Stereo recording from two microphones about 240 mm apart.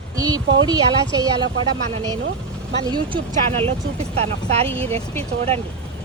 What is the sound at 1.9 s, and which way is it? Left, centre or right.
Speech, centre.